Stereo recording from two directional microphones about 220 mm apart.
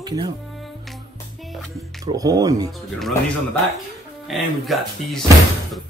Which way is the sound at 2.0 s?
15° right (ahead or behind).